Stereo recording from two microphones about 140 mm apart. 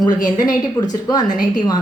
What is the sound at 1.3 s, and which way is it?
Speech, 70° left (ahead or behind).